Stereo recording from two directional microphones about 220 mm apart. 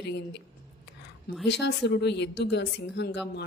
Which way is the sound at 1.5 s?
50° left (ahead or behind).